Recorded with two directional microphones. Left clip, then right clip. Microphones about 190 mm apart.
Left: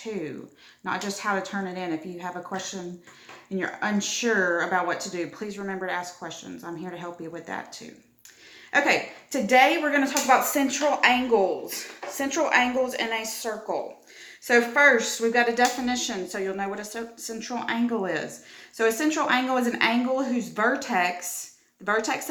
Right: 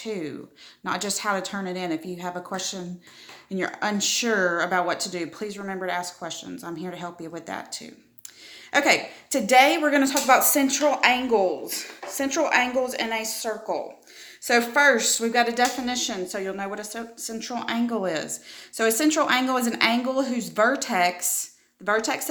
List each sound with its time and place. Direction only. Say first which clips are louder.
0.0 s a woman's voice: right 1 dB; 45° right (ahead or behind)